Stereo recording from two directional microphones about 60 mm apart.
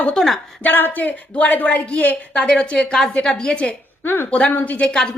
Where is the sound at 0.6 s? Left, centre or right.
Left; by 3.7 s centre.